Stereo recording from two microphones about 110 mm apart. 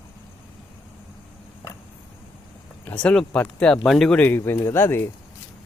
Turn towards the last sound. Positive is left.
turn(degrees=20)  # may be behind; listen again after turning